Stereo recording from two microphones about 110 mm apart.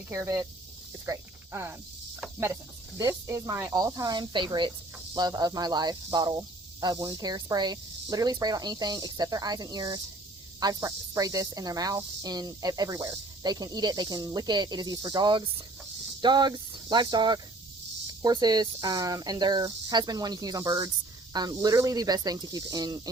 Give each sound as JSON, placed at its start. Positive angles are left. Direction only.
{"t": 0.1, "sound": "speech", "side_deg": -30}
{"t": 3.0, "sound": "speech", "side_deg": -30}